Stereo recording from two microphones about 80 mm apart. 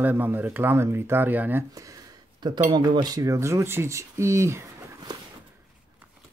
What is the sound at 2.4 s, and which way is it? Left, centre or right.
Speech, right.